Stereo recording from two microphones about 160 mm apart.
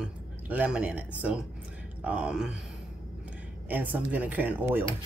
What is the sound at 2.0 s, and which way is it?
Speech, 5° right (ahead or behind).